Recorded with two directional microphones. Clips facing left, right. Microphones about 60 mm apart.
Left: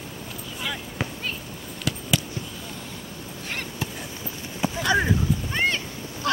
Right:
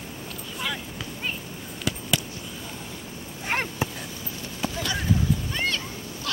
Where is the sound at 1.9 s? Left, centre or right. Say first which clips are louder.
Even; centre.